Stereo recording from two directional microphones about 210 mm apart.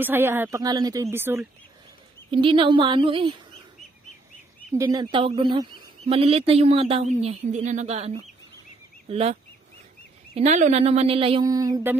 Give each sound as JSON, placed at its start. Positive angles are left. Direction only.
{"t": 0.0, "sound": "speech", "side_deg": -10}
{"t": 2.3, "sound": "speech", "side_deg": -25}
{"t": 4.7, "sound": "speech", "side_deg": -20}